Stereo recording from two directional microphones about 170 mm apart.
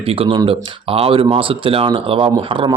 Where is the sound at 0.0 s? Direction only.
35° right (ahead or behind).